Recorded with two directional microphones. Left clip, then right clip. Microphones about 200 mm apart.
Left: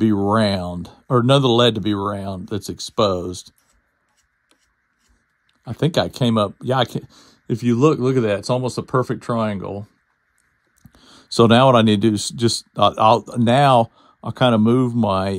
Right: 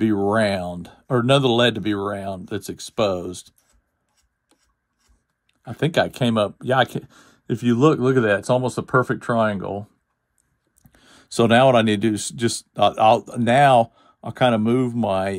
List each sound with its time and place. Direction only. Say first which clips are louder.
0.0 s speech: left 1 dB; centre (ahead or behind)
5.6 s speech: even; centre (ahead or behind)
7.6 s speech: left 1 dB; 20° right (ahead or behind)
11.1 s a sound: left 7 dB; 20° right (ahead or behind)
11.3 s speech: left 2 dB; 5° left (ahead or behind)